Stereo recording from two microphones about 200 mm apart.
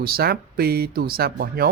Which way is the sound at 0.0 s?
50° right (ahead or behind).